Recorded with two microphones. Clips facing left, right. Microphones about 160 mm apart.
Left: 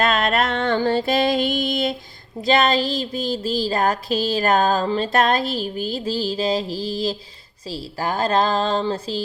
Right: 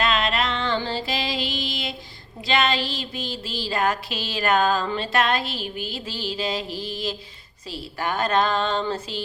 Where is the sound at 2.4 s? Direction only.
40° left (ahead or behind).